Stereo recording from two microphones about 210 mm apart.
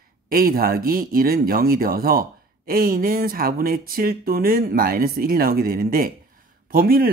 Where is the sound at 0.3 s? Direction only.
45° right (ahead or behind).